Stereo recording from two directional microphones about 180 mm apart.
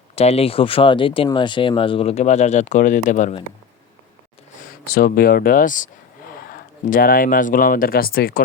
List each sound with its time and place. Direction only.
0.2 s speech: 35° left (ahead or behind)
4.9 s speech: 55° left (ahead or behind)